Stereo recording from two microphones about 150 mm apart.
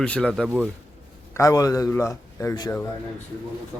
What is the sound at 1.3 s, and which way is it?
A man's voice, 20° left (ahead or behind).